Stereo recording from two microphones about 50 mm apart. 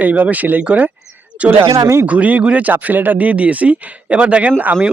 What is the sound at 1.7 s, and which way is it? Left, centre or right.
Speech, right.